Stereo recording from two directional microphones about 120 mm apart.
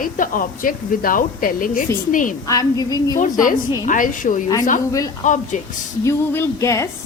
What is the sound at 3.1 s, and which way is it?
A woman's voice, 90° left.